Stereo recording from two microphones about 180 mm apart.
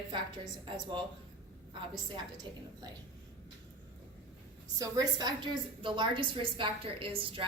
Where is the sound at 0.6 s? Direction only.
25° right (ahead or behind).